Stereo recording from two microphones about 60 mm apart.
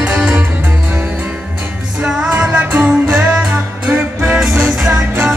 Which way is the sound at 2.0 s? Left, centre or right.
Centre.